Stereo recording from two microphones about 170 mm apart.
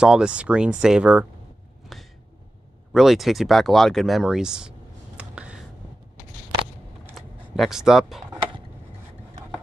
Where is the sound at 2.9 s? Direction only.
Centre (ahead or behind).